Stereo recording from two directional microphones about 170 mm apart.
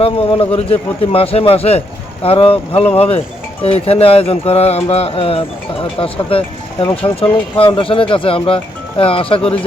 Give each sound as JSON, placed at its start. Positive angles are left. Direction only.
{"t": 0.0, "sound": "speech", "side_deg": 35}